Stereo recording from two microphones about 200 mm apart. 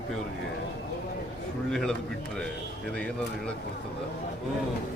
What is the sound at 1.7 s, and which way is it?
Speech, 5° left (ahead or behind).